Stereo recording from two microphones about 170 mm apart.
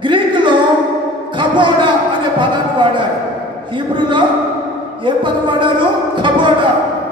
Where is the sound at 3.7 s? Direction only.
30° right (ahead or behind).